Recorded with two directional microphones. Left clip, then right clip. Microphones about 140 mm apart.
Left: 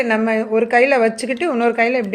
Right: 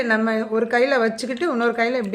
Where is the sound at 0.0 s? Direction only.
15° left (ahead or behind).